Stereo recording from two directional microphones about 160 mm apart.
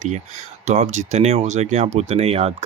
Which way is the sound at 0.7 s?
45° right (ahead or behind).